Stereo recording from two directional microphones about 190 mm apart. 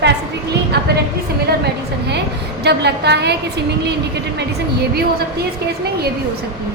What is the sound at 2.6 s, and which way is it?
Speech, 60° right (ahead or behind).